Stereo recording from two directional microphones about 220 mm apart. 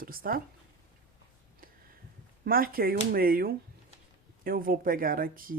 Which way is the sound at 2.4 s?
40° right (ahead or behind).